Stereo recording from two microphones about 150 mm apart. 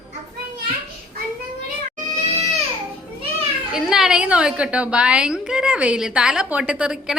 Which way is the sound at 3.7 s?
5° right (ahead or behind).